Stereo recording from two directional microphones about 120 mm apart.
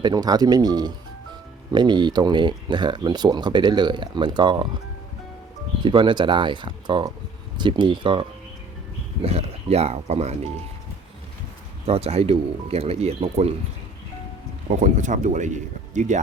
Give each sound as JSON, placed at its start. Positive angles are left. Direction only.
{"t": 0.0, "sound": "speech", "side_deg": -35}
{"t": 5.8, "sound": "speech", "side_deg": -40}
{"t": 9.2, "sound": "speech", "side_deg": -60}
{"t": 11.9, "sound": "speech", "side_deg": -60}
{"t": 14.8, "sound": "speech", "side_deg": -90}